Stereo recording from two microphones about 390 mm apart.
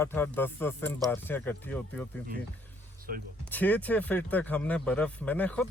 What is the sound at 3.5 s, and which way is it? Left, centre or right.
Speech, centre.